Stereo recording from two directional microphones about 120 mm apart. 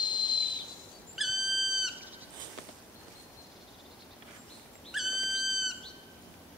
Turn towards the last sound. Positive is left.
turn(degrees=0)  # may be behind; listen again after turning